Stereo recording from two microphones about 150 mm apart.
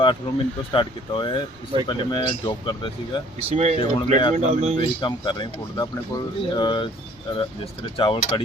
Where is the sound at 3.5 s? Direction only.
45° right (ahead or behind).